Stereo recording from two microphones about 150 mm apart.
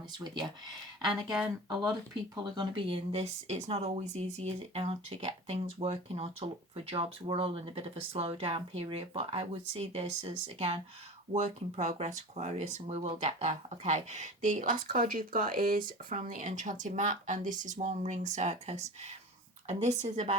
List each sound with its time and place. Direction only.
1.0 s speech: 5° right (ahead or behind)
1.7 s speech: 30° right (ahead or behind); by 20.3 s 45° right (ahead or behind)